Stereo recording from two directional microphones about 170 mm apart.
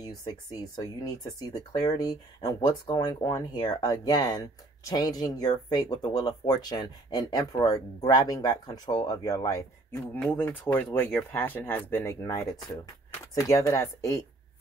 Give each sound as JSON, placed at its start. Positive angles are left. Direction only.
{"t": 0.0, "sound": "speech", "side_deg": 20}